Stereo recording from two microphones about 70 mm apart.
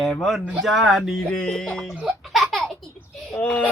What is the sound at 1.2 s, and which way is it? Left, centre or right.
Music, centre.